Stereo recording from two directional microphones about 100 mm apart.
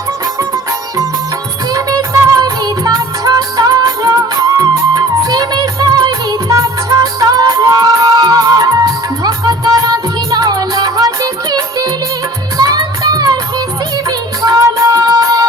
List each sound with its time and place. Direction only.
0.3 s music: 35° right (ahead or behind)